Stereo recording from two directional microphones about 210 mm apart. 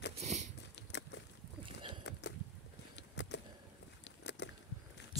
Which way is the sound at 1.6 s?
25° right (ahead or behind).